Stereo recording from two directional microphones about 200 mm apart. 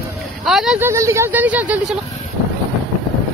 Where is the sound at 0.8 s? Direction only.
15° right (ahead or behind).